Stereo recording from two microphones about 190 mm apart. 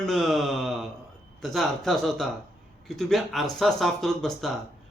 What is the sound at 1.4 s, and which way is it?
Speech, centre (ahead or behind).